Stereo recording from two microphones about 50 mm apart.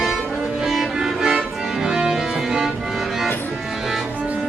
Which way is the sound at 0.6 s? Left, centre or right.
Centre.